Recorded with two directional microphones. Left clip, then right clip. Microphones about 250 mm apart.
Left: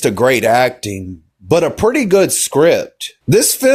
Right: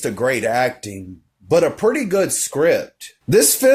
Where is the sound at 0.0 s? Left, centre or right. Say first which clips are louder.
Left 7 dB; left.